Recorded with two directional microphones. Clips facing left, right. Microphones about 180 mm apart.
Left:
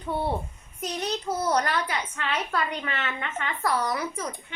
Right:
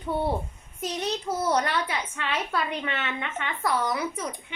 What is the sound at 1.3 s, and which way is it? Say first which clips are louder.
Speech: even; centre (ahead or behind).